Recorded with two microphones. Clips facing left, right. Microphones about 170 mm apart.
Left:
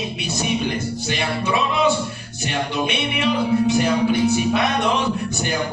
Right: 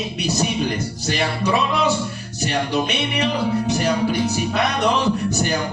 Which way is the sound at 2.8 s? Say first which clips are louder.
Left 1 dB; 40° right (ahead or behind).